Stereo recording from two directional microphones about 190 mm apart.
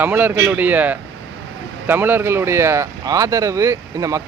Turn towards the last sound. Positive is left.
turn(degrees=-15)  # may be behind; listen again after turning